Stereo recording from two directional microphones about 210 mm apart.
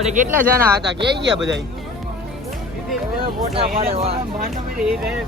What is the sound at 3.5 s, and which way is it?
Speech, 25° right (ahead or behind).